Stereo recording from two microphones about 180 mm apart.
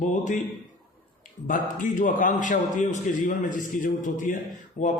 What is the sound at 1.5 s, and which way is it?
A man's voice, 45° left (ahead or behind).